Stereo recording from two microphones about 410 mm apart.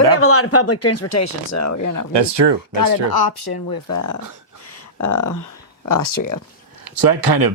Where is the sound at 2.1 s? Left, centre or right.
Right.